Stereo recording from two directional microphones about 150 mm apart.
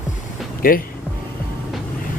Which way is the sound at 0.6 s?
70° left (ahead or behind).